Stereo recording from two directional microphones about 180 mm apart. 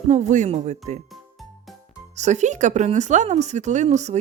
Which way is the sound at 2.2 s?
40° right (ahead or behind).